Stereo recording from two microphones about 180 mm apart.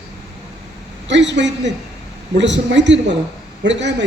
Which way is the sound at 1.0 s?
80° right.